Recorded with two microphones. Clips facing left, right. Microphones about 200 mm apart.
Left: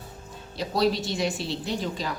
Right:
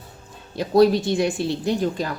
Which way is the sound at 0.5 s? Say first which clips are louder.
Right 8 dB; 50° right (ahead or behind).